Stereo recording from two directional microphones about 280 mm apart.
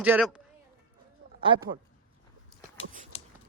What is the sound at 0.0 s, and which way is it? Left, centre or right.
Speech, centre.